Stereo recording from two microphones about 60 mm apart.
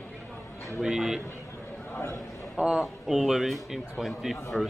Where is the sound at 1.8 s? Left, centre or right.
Left.